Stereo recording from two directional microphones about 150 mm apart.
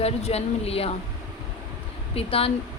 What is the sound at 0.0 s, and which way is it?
Speech, 45° left (ahead or behind).